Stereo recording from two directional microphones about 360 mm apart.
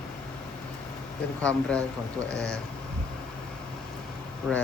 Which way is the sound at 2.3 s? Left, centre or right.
Left.